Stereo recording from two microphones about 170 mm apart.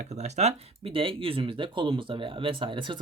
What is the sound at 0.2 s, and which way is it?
Speech, 40° right (ahead or behind).